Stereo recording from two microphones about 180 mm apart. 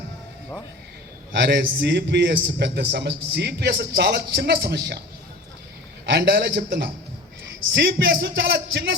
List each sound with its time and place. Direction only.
1.3 s a man's voice: 65° right (ahead or behind)
6.1 s speech: 60° right (ahead or behind)